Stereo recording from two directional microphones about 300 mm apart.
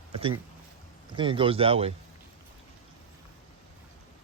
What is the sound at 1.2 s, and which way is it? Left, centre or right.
Speech, centre.